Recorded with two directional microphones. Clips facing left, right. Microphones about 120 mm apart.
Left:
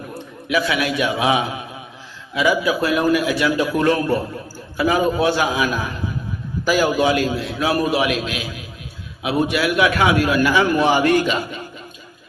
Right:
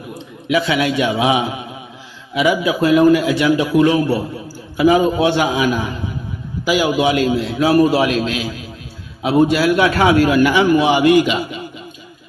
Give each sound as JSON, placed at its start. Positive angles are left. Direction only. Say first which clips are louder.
{"t": 0.1, "sound": "a man's voice", "louder": "right 4 dB", "side_deg": -25}
{"t": 4.8, "sound": "a man's voice", "louder": "right 4 dB", "side_deg": -20}